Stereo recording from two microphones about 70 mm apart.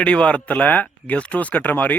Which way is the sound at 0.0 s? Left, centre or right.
Centre.